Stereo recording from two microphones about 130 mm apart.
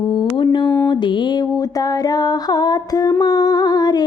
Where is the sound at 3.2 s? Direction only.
30° left (ahead or behind).